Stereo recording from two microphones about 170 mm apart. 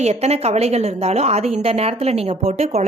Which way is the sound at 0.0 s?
40° right (ahead or behind).